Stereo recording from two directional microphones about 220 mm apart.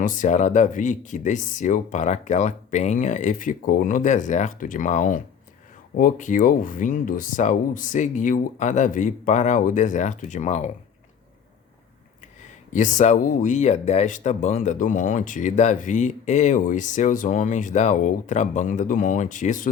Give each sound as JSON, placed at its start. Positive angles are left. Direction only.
{"t": 0.0, "sound": "speech", "side_deg": 35}
{"t": 12.7, "sound": "speech", "side_deg": 35}